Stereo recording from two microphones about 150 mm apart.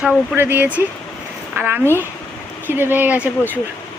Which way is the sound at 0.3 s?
15° right (ahead or behind).